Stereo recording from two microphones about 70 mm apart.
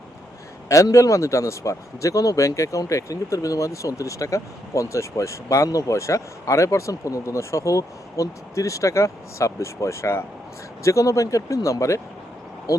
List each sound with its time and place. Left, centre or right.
0.7 s speech: left